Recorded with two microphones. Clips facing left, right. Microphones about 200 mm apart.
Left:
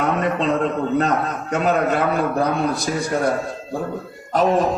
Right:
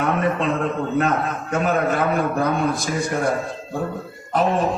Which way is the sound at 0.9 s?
40° left (ahead or behind).